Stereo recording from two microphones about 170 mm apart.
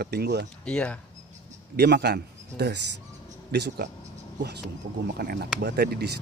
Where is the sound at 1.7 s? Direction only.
75° right (ahead or behind).